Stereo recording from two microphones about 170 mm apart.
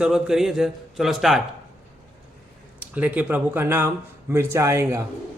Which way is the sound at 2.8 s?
10° right (ahead or behind).